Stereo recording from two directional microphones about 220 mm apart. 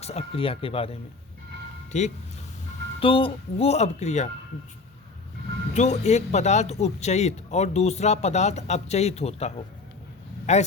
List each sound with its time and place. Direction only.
0.0 s speech: 30° left (ahead or behind)
5.7 s speech: 30° left (ahead or behind)
10.5 s speech: 30° left (ahead or behind)